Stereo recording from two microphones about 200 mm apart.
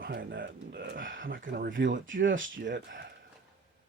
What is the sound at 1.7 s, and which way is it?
Speech, 70° right (ahead or behind).